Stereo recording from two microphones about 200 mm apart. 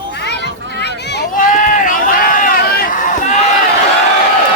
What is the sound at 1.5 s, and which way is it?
Run, 40° left (ahead or behind).